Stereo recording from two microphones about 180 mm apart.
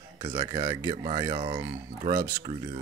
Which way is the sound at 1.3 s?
30° right (ahead or behind).